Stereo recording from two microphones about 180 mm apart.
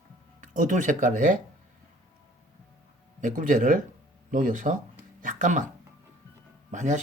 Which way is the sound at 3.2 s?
45° right (ahead or behind).